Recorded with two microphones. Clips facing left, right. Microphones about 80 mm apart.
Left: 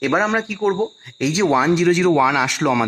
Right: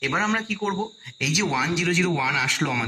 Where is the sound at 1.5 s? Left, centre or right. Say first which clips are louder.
Left 11 dB; left.